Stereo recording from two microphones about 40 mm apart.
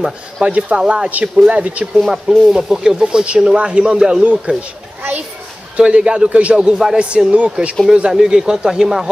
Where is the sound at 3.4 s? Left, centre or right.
Right.